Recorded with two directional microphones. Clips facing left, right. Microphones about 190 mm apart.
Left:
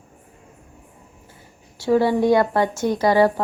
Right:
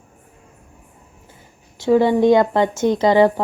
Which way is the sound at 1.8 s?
20° right (ahead or behind).